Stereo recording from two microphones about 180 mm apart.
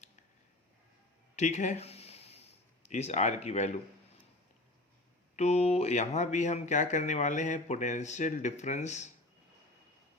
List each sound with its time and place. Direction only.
1.4 s a sound: 40° left (ahead or behind)
2.8 s speech: 40° left (ahead or behind)
5.4 s speech: 35° left (ahead or behind)